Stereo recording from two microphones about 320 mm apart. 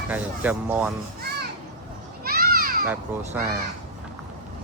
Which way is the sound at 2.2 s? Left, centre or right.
Right.